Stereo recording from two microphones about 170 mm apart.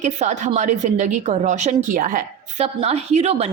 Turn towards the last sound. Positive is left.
turn(degrees=-40)  # may be behind; listen again after turning